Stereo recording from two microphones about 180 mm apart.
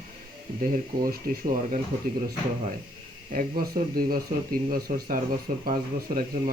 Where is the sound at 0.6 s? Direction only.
50° right (ahead or behind).